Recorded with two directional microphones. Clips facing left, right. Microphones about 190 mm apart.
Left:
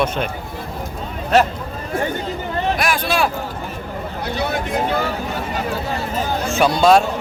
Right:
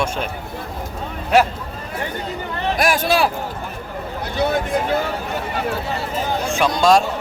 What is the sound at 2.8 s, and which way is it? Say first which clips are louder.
Speech: right 2 dB; 45° right (ahead or behind).